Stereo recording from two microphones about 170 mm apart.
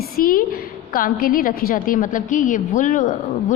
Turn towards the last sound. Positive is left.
turn(degrees=45)  # may be behind; listen again after turning